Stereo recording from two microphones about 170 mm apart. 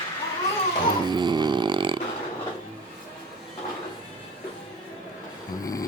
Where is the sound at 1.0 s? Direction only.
25° right (ahead or behind).